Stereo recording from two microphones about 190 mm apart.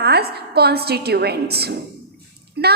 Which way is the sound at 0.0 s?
55° right (ahead or behind).